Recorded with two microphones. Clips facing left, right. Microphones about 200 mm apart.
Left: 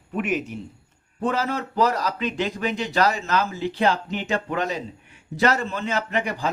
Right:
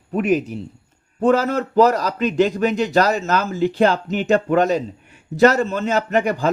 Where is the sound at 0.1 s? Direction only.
35° right (ahead or behind).